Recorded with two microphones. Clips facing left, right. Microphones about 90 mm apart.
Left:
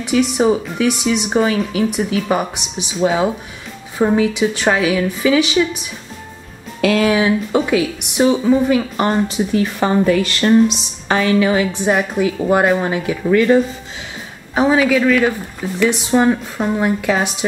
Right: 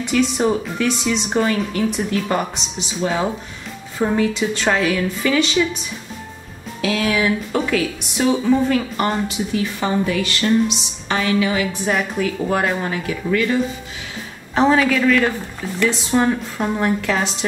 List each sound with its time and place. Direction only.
0.0 s speech: 10° left (ahead or behind)
7.1 s speech: 25° left (ahead or behind)
9.0 s speech: 35° left (ahead or behind)
11.7 s a woman's voice: 25° left (ahead or behind)
13.3 s speech: 35° left (ahead or behind)
14.5 s speech: 10° left (ahead or behind)